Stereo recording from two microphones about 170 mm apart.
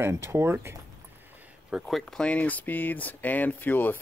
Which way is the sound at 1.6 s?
Centre (ahead or behind).